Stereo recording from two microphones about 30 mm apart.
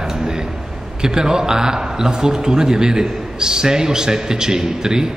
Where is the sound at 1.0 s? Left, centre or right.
Right.